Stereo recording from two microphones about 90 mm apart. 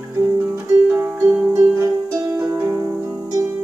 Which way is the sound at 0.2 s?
35° right (ahead or behind).